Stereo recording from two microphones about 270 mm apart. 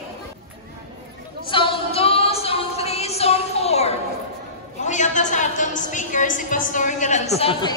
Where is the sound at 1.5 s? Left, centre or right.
Centre.